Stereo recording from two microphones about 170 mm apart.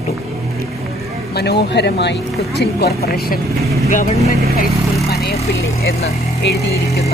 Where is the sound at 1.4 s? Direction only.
75° left (ahead or behind).